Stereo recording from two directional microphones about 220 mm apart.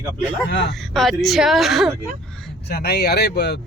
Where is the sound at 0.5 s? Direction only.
50° left (ahead or behind).